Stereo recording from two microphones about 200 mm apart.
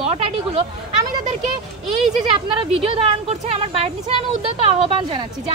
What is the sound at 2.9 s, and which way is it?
A woman's voice, 30° right (ahead or behind).